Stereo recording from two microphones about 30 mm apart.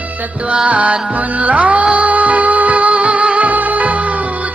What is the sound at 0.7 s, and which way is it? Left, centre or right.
Music, right.